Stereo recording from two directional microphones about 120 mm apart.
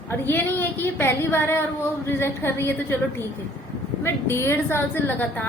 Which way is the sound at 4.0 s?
20° left (ahead or behind).